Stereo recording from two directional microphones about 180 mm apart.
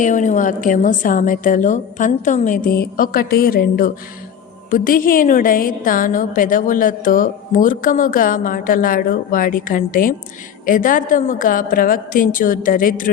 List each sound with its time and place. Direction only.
0.0 s a woman's voice: 45° left (ahead or behind)